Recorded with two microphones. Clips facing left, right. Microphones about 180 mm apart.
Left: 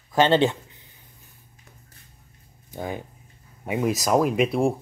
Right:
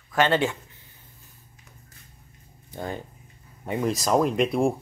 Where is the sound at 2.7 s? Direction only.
10° left (ahead or behind).